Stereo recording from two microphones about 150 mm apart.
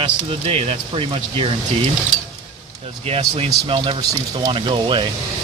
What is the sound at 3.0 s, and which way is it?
Speech, 40° right (ahead or behind).